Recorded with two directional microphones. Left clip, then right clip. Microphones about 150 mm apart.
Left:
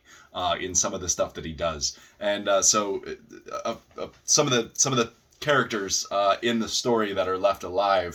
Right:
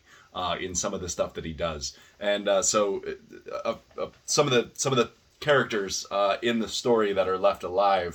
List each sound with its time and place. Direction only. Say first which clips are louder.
0.3 s speech: left 4 dB; 15° right (ahead or behind)